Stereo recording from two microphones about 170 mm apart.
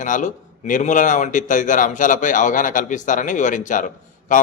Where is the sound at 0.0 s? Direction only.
50° left (ahead or behind).